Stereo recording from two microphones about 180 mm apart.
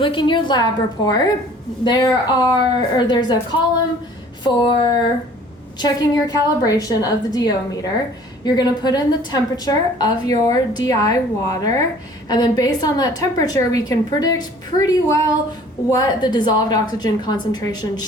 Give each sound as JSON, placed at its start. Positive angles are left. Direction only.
{"t": 0.0, "sound": "a woman's voice", "side_deg": 25}
{"t": 4.4, "sound": "a woman's voice", "side_deg": 25}